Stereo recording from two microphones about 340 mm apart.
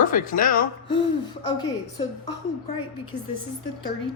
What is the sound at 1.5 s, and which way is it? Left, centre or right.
Speech, centre.